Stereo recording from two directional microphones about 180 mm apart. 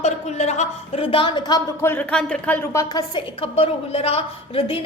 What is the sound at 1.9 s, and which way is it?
A woman's voice, 5° left (ahead or behind).